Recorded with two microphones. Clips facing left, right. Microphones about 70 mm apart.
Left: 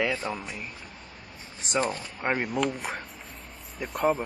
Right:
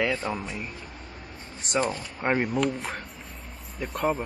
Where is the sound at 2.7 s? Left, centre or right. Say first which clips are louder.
Right 1 dB; centre.